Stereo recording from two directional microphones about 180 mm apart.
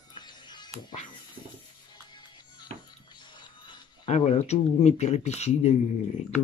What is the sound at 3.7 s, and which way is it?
Speech, 35° left (ahead or behind).